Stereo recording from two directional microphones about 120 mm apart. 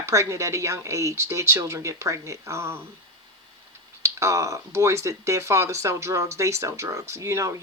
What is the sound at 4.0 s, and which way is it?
Speech, 25° right (ahead or behind).